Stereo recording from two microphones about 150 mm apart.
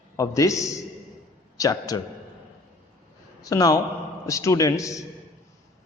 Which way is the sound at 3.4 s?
25° left (ahead or behind).